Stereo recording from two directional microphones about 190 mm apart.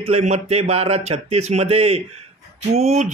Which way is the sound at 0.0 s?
35° right (ahead or behind).